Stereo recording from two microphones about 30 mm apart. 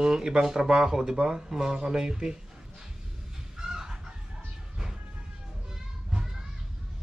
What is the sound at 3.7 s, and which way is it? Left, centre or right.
Chicken, right.